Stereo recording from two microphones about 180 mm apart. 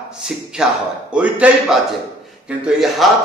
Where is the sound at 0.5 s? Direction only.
5° right (ahead or behind).